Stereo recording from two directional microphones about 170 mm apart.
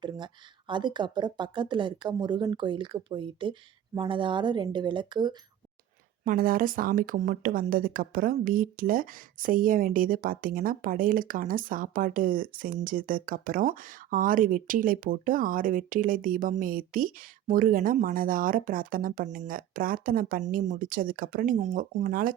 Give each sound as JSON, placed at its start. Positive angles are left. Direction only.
{"t": 0.7, "sound": "speech", "side_deg": -25}
{"t": 6.2, "sound": "speech", "side_deg": -55}